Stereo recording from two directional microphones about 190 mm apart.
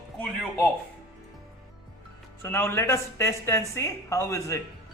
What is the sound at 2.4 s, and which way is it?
A man's voice, 10° left (ahead or behind).